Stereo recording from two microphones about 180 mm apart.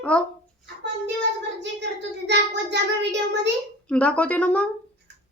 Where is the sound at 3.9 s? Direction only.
5° left (ahead or behind).